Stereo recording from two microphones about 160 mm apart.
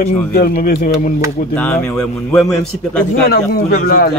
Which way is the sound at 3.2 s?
70° left (ahead or behind).